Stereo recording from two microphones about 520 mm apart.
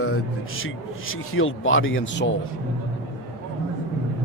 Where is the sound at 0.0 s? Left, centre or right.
Left.